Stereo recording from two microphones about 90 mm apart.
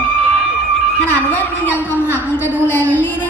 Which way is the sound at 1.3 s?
25° left (ahead or behind).